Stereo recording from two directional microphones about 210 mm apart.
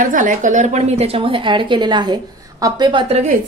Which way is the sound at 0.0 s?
40° right (ahead or behind).